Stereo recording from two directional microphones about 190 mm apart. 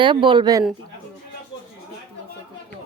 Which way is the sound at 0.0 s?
25° right (ahead or behind).